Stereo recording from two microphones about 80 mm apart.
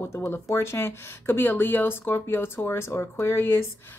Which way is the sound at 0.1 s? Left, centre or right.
Left.